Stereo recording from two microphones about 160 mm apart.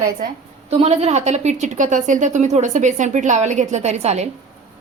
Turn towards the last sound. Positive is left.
turn(degrees=-45)  # may be behind; listen again after turning